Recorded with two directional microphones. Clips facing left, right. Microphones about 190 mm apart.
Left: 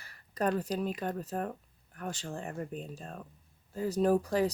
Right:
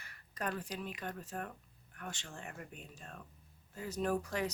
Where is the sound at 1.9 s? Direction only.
35° left (ahead or behind).